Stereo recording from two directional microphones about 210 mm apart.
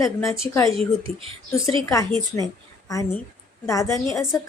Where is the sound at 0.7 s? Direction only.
25° right (ahead or behind).